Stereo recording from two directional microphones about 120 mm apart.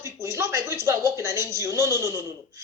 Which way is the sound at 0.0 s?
25° right (ahead or behind).